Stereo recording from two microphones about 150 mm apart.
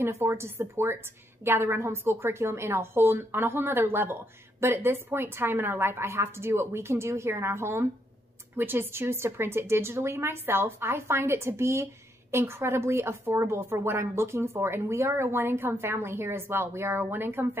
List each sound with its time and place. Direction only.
0.0 s a woman's voice: 20° right (ahead or behind)